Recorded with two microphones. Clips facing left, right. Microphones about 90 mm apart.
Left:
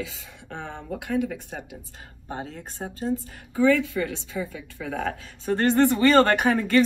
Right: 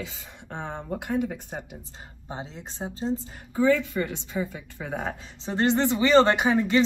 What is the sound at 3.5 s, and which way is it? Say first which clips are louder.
Speech: left 1 dB; 25° right (ahead or behind).